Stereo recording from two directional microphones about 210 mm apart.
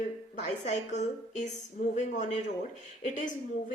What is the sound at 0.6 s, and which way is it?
A woman's voice, 35° left (ahead or behind).